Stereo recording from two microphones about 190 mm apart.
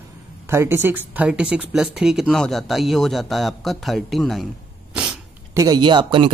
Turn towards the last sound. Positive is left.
turn(degrees=-25)  # may be behind; listen again after turning